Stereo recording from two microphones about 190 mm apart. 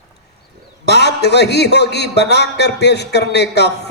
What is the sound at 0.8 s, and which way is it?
A man's voice, 60° left (ahead or behind).